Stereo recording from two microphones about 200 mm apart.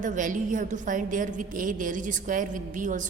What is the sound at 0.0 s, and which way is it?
A woman's voice, 40° right (ahead or behind).